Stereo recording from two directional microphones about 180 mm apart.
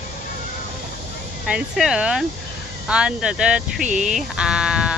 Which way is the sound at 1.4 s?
5° right (ahead or behind).